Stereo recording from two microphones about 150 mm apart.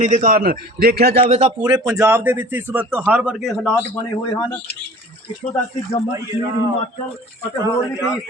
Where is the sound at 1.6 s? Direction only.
25° right (ahead or behind); by 3.5 s 5° right (ahead or behind).